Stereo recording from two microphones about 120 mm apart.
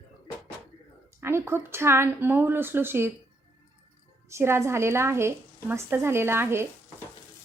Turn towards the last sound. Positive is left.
turn(degrees=-20)  # may be behind; listen again after turning